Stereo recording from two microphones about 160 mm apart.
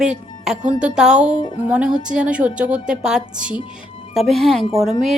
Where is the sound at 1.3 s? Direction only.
25° left (ahead or behind).